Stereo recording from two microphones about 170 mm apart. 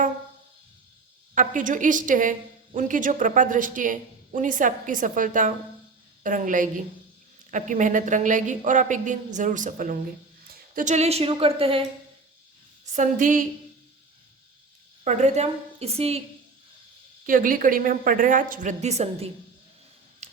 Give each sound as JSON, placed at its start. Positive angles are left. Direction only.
{"t": 1.4, "sound": "speech", "side_deg": -50}
{"t": 13.0, "sound": "speech", "side_deg": -50}
{"t": 15.0, "sound": "speech", "side_deg": -40}
{"t": 17.2, "sound": "speech", "side_deg": -50}
{"t": 20.2, "sound": "camera", "side_deg": -40}